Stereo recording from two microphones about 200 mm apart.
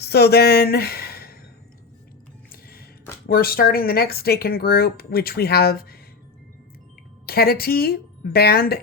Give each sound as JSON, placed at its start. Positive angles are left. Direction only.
{"t": 0.0, "sound": "speech", "side_deg": 55}
{"t": 2.5, "sound": "music", "side_deg": 50}
{"t": 3.2, "sound": "speech", "side_deg": 50}
{"t": 7.3, "sound": "a woman's voice", "side_deg": 50}